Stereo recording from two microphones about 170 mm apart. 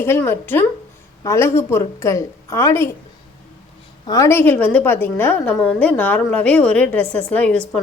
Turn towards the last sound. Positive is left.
turn(degrees=5)  # may be behind; listen again after turning